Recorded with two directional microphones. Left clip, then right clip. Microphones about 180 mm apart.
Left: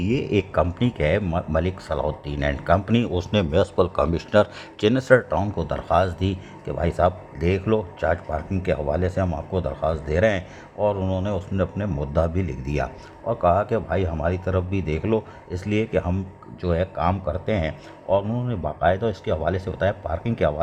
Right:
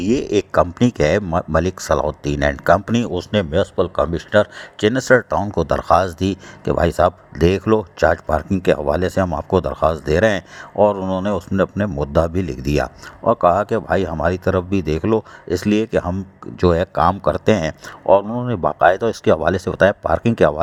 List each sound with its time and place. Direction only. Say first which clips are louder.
0.0 s speech: right 5 dB; 35° right (ahead or behind)
3.1 s a man's voice: right 3 dB; 20° right (ahead or behind)
4.9 s speech: right 3 dB; 35° right (ahead or behind); by 20.6 s 50° right (ahead or behind)